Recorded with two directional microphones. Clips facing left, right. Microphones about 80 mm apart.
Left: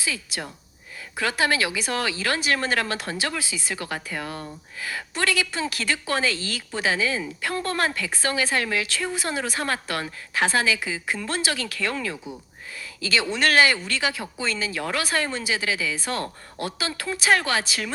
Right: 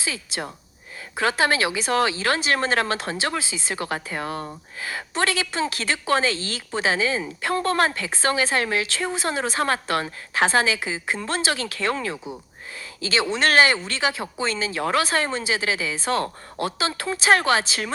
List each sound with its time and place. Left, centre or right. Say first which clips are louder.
0.0 s speech: right 1 dB; right